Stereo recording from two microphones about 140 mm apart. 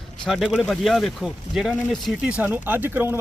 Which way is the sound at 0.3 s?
Centre (ahead or behind).